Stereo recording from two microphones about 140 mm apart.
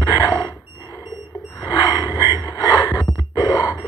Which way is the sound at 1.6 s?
30° left (ahead or behind).